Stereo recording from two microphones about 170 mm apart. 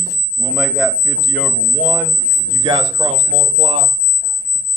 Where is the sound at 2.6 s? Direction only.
25° right (ahead or behind).